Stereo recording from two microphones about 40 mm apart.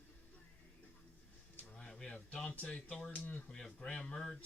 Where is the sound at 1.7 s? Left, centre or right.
Centre.